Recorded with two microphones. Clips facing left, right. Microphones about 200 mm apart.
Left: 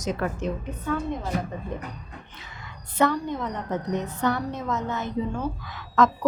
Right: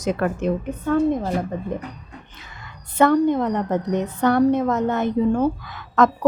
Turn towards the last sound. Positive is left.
turn(degrees=-55)  # may be behind; listen again after turning